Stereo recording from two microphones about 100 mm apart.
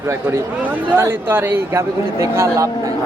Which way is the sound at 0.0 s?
25° right (ahead or behind).